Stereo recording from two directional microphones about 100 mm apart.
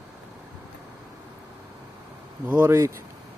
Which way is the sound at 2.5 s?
25° right (ahead or behind).